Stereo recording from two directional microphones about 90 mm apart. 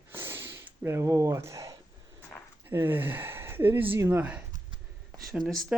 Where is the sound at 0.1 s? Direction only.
25° right (ahead or behind).